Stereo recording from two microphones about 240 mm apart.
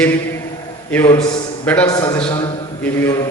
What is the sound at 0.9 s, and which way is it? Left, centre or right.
A man's voice, centre.